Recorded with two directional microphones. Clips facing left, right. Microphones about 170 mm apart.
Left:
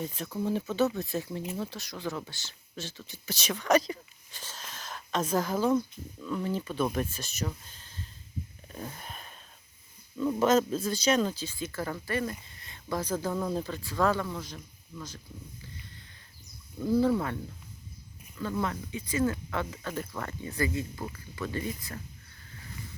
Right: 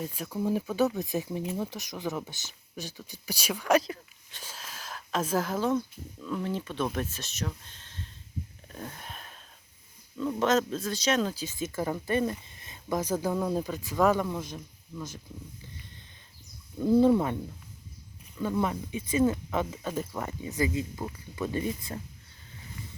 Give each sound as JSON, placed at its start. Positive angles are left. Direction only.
{"t": 0.0, "sound": "speech", "side_deg": -10}
{"t": 4.4, "sound": "a sound", "side_deg": -5}
{"t": 6.2, "sound": "speech", "side_deg": 0}
{"t": 8.7, "sound": "a sound", "side_deg": 0}
{"t": 10.2, "sound": "speech", "side_deg": 5}
{"t": 11.3, "sound": "speech", "side_deg": -20}
{"t": 16.8, "sound": "speech", "side_deg": -20}